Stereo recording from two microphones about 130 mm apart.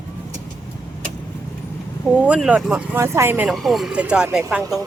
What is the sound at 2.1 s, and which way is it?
Speech, 10° right (ahead or behind).